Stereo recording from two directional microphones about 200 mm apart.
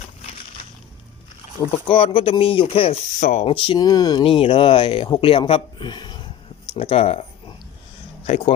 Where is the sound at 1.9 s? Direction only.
25° left (ahead or behind).